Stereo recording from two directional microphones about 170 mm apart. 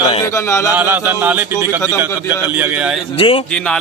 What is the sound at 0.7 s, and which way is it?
Speech, 10° right (ahead or behind).